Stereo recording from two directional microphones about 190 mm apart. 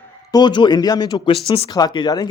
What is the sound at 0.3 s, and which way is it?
A man's voice, 20° left (ahead or behind).